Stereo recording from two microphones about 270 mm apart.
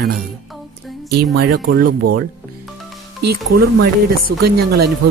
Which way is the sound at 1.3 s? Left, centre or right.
Right.